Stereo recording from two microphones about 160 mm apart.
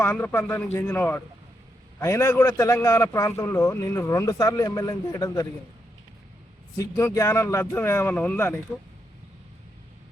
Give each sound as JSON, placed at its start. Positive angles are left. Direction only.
{"t": 0.0, "sound": "a man's voice", "side_deg": 10}
{"t": 6.7, "sound": "speech", "side_deg": 20}